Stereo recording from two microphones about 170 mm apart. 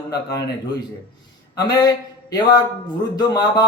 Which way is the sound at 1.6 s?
20° left (ahead or behind).